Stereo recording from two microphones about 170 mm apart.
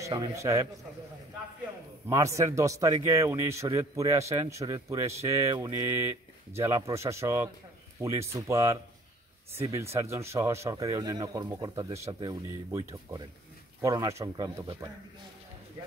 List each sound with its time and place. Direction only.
0.0 s speech: 20° right (ahead or behind)
2.0 s a man's voice: 20° right (ahead or behind)